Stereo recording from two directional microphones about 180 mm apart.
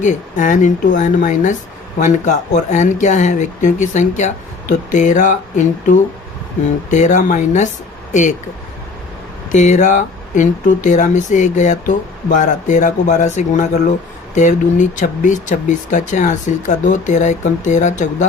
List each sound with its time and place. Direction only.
0.0 s speech: 45° left (ahead or behind)
9.5 s speech: 45° left (ahead or behind)